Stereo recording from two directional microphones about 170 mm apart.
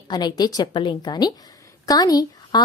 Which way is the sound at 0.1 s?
25° left (ahead or behind).